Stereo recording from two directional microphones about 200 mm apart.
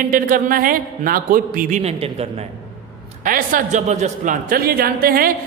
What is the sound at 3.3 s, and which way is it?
A man's voice, 45° right (ahead or behind).